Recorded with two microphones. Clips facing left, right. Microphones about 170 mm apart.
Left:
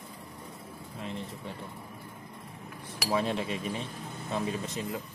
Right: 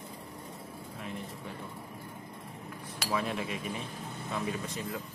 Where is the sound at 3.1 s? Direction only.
30° left (ahead or behind).